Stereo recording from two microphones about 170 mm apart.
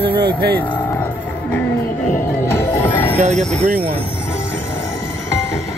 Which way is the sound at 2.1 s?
15° left (ahead or behind).